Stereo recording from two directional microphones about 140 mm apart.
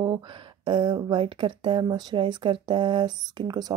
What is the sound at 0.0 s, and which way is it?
Speech, 30° right (ahead or behind).